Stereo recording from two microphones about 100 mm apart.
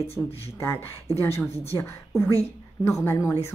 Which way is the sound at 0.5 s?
25° left (ahead or behind).